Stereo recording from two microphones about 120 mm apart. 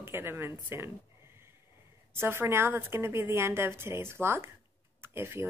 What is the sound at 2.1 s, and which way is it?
A woman's voice, 20° right (ahead or behind).